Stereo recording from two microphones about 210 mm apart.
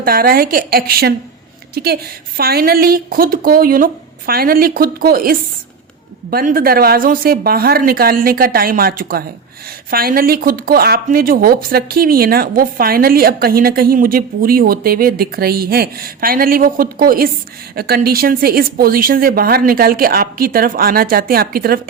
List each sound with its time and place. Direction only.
0.0 s speech: 45° right (ahead or behind)